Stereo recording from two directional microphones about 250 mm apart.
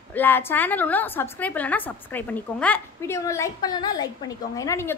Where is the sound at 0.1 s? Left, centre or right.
Centre.